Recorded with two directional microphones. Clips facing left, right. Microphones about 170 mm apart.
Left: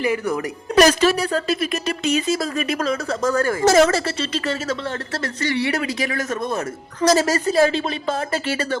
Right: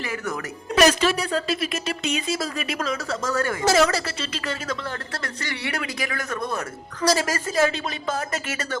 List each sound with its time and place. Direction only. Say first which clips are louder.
0.8 s speech: left 4 dB; 40° left (ahead or behind)
4.0 s speech: left 6 dB; 30° left (ahead or behind)
7.1 s speech: left 6 dB; 40° left (ahead or behind)